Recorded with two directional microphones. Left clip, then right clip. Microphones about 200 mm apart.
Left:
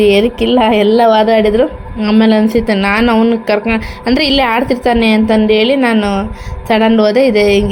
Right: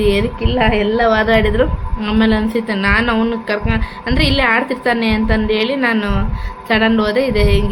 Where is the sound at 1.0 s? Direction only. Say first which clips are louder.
Left 2 dB; 30° left (ahead or behind).